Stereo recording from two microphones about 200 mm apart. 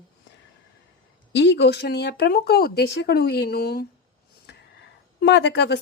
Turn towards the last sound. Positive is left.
turn(degrees=60)  # may be behind; listen again after turning